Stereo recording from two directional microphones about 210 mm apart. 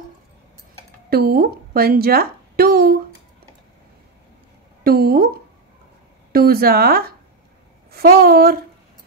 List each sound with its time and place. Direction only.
1.1 s a woman's voice: 45° right (ahead or behind)
4.8 s a woman's voice: 45° right (ahead or behind)
6.3 s a woman's voice: 45° right (ahead or behind)